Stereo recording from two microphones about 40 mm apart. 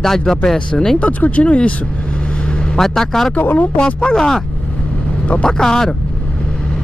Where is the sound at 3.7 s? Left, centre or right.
Left.